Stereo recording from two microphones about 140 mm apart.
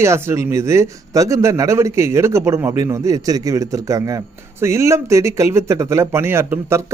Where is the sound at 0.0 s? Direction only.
20° right (ahead or behind).